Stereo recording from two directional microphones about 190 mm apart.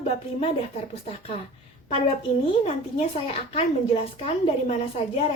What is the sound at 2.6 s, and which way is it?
A woman's voice, 35° left (ahead or behind).